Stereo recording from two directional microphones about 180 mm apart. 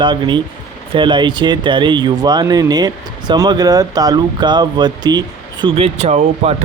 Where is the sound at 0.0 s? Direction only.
25° right (ahead or behind).